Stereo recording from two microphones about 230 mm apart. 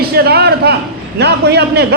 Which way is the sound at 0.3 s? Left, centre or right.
Right.